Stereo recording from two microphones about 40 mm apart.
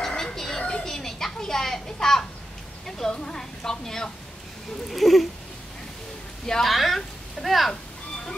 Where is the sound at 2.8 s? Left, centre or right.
Centre.